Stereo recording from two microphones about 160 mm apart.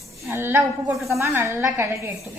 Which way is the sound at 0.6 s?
Centre (ahead or behind).